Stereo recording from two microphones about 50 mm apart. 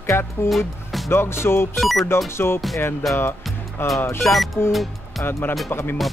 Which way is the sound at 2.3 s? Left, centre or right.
Left.